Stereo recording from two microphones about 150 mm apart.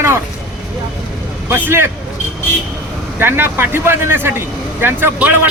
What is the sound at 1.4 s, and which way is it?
Speech, 15° right (ahead or behind).